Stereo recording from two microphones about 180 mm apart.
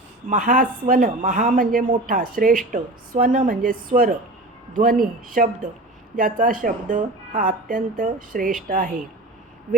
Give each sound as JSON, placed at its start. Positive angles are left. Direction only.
{"t": 0.3, "sound": "speech", "side_deg": -45}